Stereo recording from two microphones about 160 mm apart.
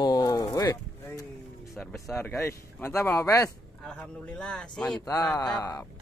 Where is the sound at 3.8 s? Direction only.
5° left (ahead or behind).